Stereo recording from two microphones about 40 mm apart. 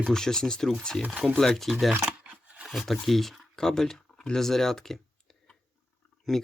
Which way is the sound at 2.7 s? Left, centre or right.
Centre.